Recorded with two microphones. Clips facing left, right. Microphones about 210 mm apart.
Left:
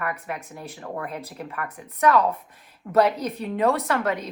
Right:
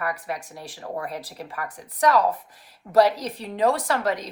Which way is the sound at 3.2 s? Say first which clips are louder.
Even; 30° right (ahead or behind).